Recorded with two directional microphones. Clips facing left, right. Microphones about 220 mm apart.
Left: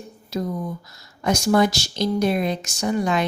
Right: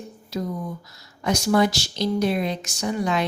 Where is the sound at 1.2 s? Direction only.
45° left (ahead or behind).